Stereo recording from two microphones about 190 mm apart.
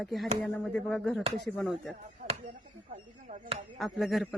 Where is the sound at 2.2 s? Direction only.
35° right (ahead or behind).